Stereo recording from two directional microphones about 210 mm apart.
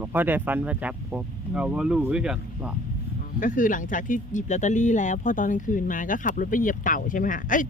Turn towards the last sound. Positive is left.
turn(degrees=40)  # may be behind; listen again after turning